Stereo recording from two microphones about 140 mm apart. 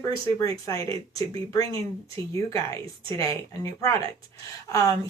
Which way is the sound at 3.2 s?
20° left (ahead or behind).